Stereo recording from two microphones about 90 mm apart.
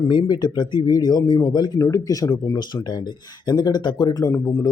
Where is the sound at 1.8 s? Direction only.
40° left (ahead or behind).